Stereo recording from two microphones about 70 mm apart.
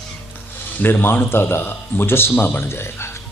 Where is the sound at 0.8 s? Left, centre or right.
Left.